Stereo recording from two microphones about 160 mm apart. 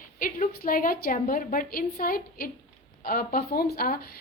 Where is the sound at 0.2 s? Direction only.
60° left (ahead or behind).